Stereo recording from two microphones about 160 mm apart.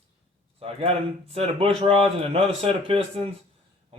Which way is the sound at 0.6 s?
35° right (ahead or behind).